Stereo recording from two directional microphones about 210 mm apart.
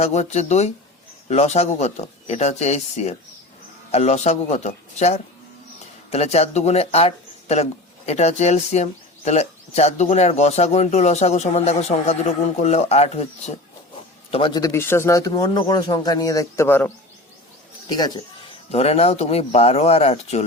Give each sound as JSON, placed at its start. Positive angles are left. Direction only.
{"t": 0.0, "sound": "a man's voice", "side_deg": 30}
{"t": 18.7, "sound": "speech", "side_deg": 30}